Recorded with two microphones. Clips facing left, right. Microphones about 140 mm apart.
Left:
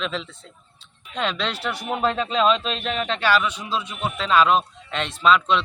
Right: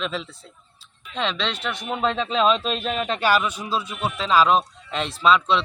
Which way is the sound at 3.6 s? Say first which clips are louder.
Right 1 dB; 40° right (ahead or behind).